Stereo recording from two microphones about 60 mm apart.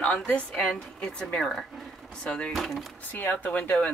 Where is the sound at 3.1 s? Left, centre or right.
Left.